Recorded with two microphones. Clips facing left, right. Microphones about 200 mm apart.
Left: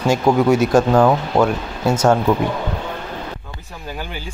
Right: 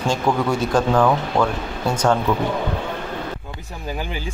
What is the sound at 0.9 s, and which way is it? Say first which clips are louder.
Speech: left 3 dB; 25° left (ahead or behind).